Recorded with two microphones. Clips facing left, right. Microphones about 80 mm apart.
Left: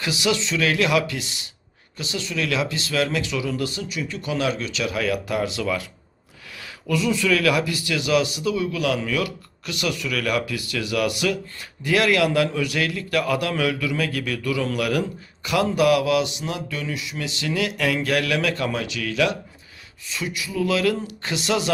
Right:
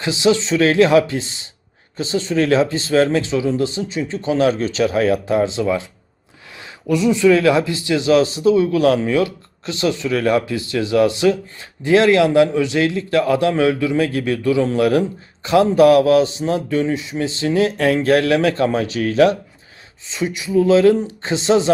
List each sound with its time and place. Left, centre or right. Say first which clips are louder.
0.0 s a man's voice: right 7 dB; right
20.1 s a man's voice: right 7 dB; right